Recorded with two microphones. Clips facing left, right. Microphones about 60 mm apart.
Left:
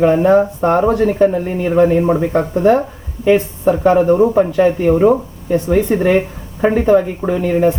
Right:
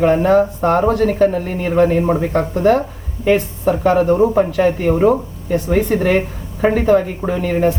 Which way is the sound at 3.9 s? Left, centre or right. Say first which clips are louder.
Left 2 dB; centre.